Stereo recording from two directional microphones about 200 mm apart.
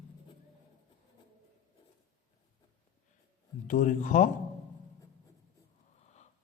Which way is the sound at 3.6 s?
40° left (ahead or behind).